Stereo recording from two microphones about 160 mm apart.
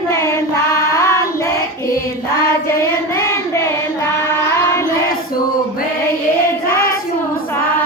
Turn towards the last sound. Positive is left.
turn(degrees=70)  # may be behind; listen again after turning